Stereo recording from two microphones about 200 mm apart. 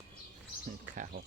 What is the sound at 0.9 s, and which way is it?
Speech, 40° right (ahead or behind).